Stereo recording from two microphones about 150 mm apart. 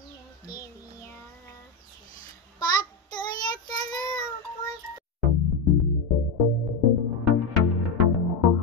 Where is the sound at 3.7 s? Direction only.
25° left (ahead or behind).